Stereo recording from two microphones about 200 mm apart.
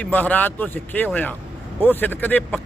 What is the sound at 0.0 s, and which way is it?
Speech, 10° left (ahead or behind).